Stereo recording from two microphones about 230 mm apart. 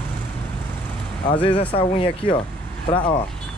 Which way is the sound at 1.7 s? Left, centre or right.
Left.